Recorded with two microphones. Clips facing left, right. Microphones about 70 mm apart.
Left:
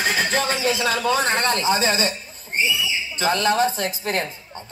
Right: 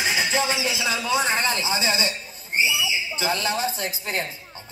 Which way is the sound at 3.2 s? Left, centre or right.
Left.